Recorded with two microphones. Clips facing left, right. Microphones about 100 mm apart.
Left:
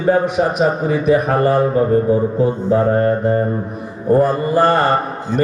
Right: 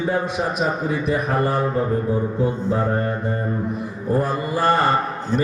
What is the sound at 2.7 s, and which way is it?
Speech, 60° left (ahead or behind).